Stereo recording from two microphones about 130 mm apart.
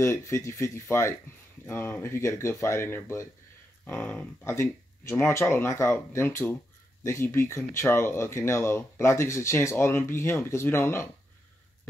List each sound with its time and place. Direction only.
0.0 s speech: 20° left (ahead or behind)